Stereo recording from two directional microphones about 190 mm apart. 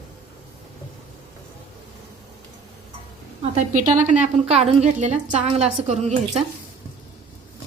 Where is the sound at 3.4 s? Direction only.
40° right (ahead or behind).